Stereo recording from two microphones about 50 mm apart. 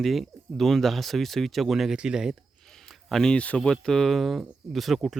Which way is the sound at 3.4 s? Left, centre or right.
Left.